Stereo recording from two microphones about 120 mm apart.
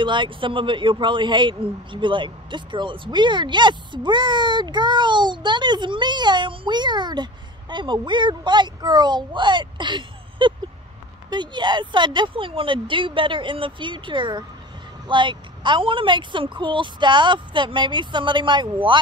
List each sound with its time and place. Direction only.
0.0 s speech: 40° right (ahead or behind)